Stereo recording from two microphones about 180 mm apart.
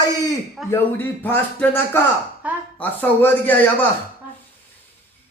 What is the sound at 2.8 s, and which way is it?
Speech, 10° left (ahead or behind).